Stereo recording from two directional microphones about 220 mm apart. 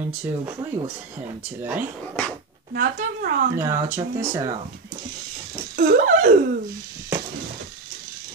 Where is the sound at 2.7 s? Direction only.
40° right (ahead or behind).